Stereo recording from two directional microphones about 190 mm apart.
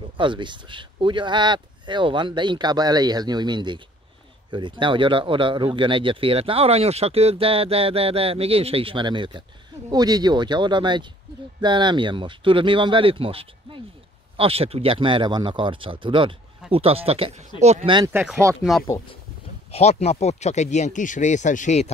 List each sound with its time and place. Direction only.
0.2 s speech: 25° right (ahead or behind)
18.1 s speech: centre (ahead or behind)
19.7 s speech: 35° left (ahead or behind)